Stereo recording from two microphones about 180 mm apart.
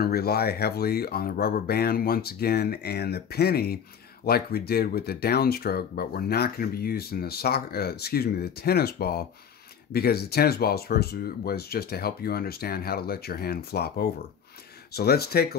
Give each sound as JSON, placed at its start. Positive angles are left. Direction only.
{"t": 0.0, "sound": "speech", "side_deg": 60}